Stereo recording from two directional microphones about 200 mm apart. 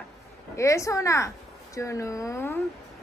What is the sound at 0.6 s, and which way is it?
A woman's voice, 15° left (ahead or behind).